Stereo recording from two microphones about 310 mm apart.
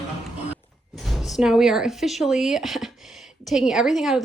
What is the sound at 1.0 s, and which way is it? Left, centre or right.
Speech, centre.